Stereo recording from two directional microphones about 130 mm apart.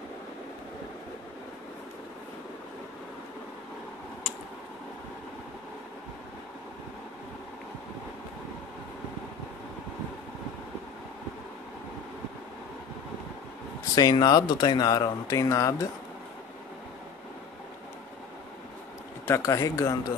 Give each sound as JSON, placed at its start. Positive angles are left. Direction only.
{"t": 13.9, "sound": "speech", "side_deg": 30}
{"t": 19.2, "sound": "speech", "side_deg": 20}